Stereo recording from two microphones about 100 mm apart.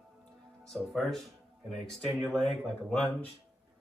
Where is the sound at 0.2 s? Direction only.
10° left (ahead or behind).